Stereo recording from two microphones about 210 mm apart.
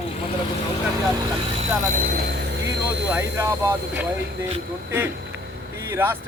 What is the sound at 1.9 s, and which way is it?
Speech, 45° right (ahead or behind).